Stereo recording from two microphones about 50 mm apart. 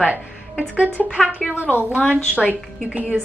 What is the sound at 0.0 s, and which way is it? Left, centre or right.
Speech, right.